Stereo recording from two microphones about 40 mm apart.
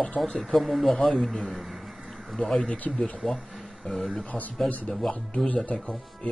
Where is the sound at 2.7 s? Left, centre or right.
Left.